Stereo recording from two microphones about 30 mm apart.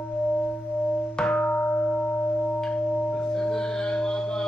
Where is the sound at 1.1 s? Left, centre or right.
Left.